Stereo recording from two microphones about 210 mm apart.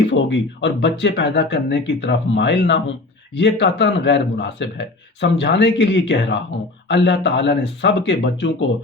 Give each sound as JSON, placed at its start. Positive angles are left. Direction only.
{"t": 0.1, "sound": "speech", "side_deg": 60}